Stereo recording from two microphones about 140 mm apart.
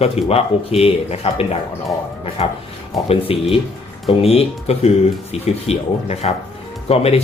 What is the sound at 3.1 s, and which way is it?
Speech, 40° left (ahead or behind).